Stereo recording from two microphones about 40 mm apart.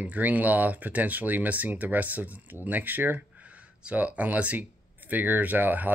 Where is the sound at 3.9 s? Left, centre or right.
Right.